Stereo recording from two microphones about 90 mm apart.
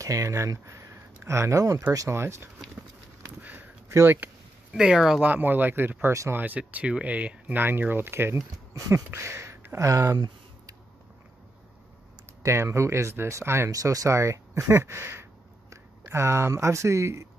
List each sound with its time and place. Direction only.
0.0 s speech: 40° right (ahead or behind)
3.3 s a sound: 20° right (ahead or behind)
3.9 s speech: 25° right (ahead or behind)
4.7 s speech: 5° right (ahead or behind)
5.2 s speech: 20° right (ahead or behind)
8.7 s a sound: 40° right (ahead or behind)
9.1 s speech: 30° right (ahead or behind)
10.1 s a sound: 55° right (ahead or behind)
12.4 s speech: 30° right (ahead or behind)